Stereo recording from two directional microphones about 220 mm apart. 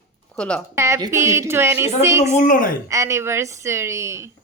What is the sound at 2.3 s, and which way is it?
Speech, 35° left (ahead or behind).